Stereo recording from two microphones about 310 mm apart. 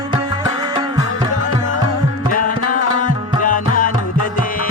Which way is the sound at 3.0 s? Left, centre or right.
Left.